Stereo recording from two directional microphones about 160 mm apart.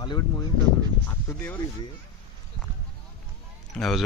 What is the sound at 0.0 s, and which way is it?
Speech, 30° left (ahead or behind).